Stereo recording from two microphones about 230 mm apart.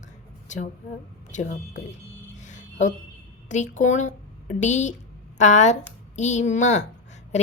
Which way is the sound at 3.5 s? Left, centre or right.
Left.